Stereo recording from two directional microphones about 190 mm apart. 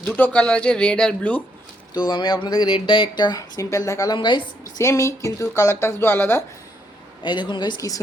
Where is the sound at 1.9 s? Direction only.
25° left (ahead or behind).